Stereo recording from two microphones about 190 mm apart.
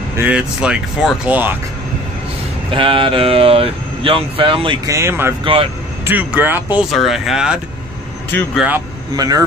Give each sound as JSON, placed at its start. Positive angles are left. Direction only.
{"t": 0.2, "sound": "speech", "side_deg": -5}
{"t": 2.7, "sound": "speech", "side_deg": -25}
{"t": 4.9, "sound": "speech", "side_deg": -15}
{"t": 5.4, "sound": "speech", "side_deg": -30}
{"t": 6.0, "sound": "speech", "side_deg": -10}
{"t": 8.5, "sound": "speech", "side_deg": -10}
{"t": 9.1, "sound": "speech", "side_deg": -20}